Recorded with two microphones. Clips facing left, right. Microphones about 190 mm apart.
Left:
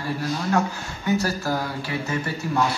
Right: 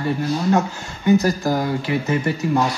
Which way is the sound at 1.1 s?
15° right (ahead or behind).